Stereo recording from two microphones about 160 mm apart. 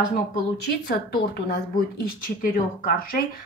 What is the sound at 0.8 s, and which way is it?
A woman's voice, 70° left (ahead or behind).